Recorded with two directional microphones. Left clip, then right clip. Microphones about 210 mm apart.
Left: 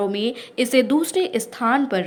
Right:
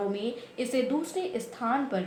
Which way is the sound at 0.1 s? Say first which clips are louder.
Left 8 dB; 30° left (ahead or behind).